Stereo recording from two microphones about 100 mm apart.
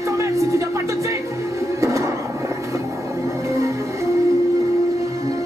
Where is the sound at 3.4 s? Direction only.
30° right (ahead or behind).